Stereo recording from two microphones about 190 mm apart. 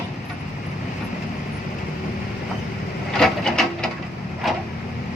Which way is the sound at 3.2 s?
Centre (ahead or behind).